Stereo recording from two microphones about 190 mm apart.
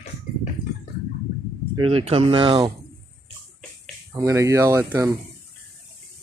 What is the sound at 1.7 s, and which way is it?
Speech, 30° right (ahead or behind).